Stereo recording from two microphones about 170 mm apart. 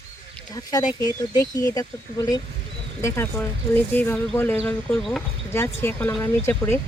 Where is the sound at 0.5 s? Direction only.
20° left (ahead or behind).